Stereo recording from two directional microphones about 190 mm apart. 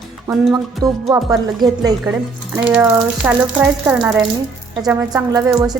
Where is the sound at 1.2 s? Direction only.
Centre (ahead or behind).